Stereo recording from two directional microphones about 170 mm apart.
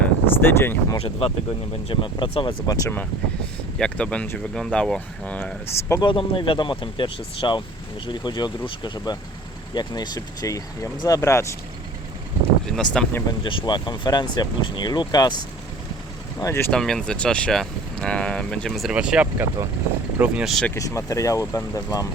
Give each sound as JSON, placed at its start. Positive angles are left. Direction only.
{"t": 0.4, "sound": "speech", "side_deg": 15}
{"t": 0.9, "sound": "speech", "side_deg": 35}
{"t": 3.8, "sound": "speech", "side_deg": 5}
{"t": 6.0, "sound": "speech", "side_deg": 30}
{"t": 12.6, "sound": "speech", "side_deg": 5}
{"t": 13.4, "sound": "speech", "side_deg": 30}
{"t": 16.7, "sound": "speech", "side_deg": 5}
{"t": 20.7, "sound": "speech", "side_deg": 20}